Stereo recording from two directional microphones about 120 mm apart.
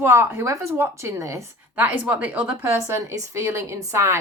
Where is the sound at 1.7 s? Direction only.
10° right (ahead or behind).